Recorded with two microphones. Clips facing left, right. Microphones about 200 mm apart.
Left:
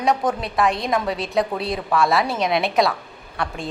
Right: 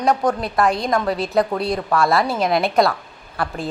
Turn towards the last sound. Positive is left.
turn(degrees=0)  # may be behind; listen again after turning